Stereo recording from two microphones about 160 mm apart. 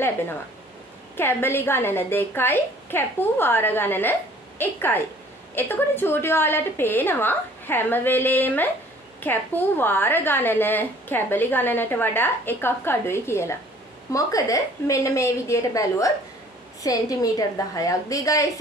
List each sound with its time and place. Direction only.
1.1 s a woman's voice: 15° left (ahead or behind)